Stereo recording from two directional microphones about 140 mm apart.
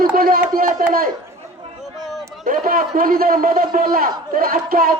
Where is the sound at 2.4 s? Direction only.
80° right.